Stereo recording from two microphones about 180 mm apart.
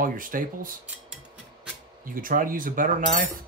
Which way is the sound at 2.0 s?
50° right (ahead or behind).